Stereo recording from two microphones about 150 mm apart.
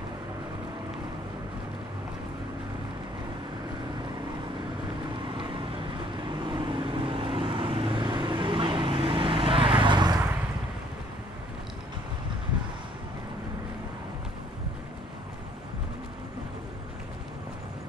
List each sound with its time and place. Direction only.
5.2 s vehicle: 30° right (ahead or behind)